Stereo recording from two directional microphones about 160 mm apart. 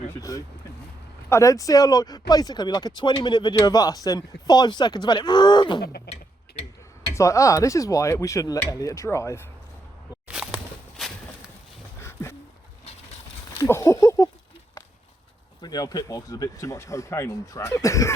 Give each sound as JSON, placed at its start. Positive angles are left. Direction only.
{"t": 0.2, "sound": "speech", "side_deg": 20}
{"t": 7.1, "sound": "speech", "side_deg": 20}
{"t": 10.2, "sound": "a sound", "side_deg": -5}
{"t": 11.9, "sound": "a sound", "side_deg": 15}
{"t": 13.6, "sound": "speech", "side_deg": 15}
{"t": 15.6, "sound": "speech", "side_deg": 25}